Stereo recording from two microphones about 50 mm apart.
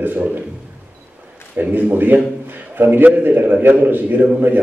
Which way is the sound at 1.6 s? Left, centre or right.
Right.